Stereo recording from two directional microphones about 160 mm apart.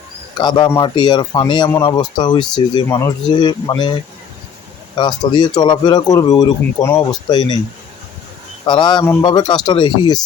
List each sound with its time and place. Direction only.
0.3 s speech: 25° left (ahead or behind)
4.9 s speech: 25° left (ahead or behind)
8.6 s speech: 30° left (ahead or behind)